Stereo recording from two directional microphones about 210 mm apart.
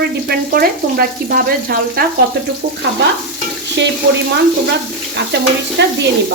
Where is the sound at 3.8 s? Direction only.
60° right (ahead or behind).